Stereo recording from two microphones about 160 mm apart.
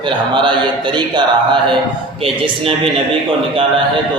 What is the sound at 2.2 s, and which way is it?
Speech, 35° right (ahead or behind).